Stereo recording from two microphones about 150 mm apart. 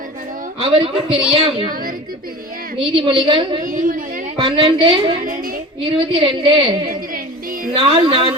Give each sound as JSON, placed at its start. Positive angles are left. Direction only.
{"t": 0.6, "sound": "a woman's voice", "side_deg": -40}
{"t": 2.7, "sound": "a woman's voice", "side_deg": -35}
{"t": 3.6, "sound": "a woman's voice", "side_deg": -70}
{"t": 4.4, "sound": "a woman's voice", "side_deg": -35}
{"t": 7.9, "sound": "a woman's voice", "side_deg": -35}